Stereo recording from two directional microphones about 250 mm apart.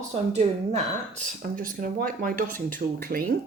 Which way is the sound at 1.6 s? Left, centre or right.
Right.